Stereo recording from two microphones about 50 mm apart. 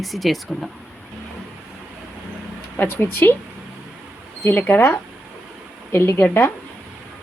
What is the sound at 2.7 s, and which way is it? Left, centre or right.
Speech, left.